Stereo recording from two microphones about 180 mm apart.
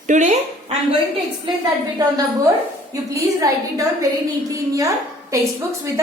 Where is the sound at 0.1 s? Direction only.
45° right (ahead or behind).